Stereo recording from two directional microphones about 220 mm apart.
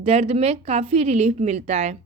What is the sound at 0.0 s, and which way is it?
A woman's voice, 25° right (ahead or behind).